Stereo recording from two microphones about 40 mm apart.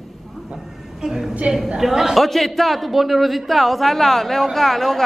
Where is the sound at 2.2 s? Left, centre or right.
Centre.